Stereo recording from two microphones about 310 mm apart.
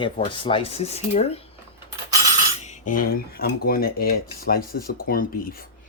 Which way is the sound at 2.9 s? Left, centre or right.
Left.